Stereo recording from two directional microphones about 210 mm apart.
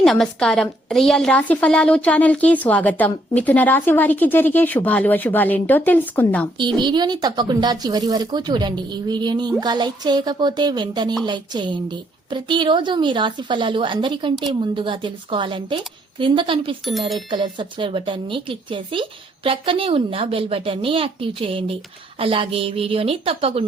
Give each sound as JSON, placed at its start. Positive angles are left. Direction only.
{"t": 0.0, "sound": "a woman's voice", "side_deg": 0}
{"t": 6.7, "sound": "speech", "side_deg": -20}